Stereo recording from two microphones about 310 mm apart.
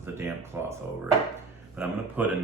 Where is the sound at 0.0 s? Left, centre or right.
Centre.